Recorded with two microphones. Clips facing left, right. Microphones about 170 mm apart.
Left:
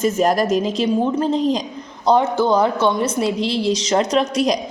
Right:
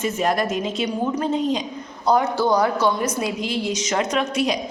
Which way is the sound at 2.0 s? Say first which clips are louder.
Left 3 dB; 25° left (ahead or behind).